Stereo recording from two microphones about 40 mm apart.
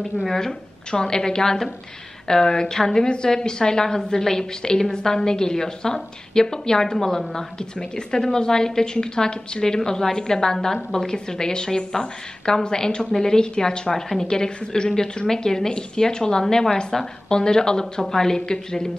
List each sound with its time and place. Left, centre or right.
0.2 s a woman's voice: centre
9.8 s a woman's voice: centre